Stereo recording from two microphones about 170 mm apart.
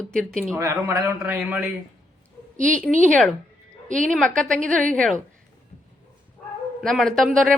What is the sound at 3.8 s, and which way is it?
Speech, 50° right (ahead or behind).